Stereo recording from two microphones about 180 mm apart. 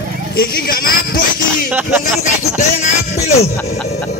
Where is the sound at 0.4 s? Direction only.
55° left (ahead or behind).